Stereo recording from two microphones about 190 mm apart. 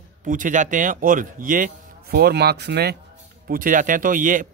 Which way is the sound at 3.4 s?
45° right (ahead or behind).